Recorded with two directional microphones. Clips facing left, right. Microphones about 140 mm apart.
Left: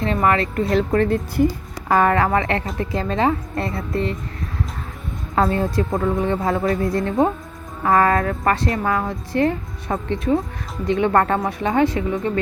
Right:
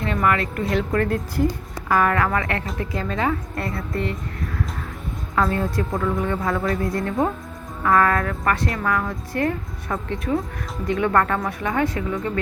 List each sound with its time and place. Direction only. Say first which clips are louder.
0.0 s speech: left 3 dB; 25° left (ahead or behind)
0.9 s a woman's voice: left 4 dB; 20° left (ahead or behind)
5.3 s a woman's voice: left 3 dB; 25° left (ahead or behind)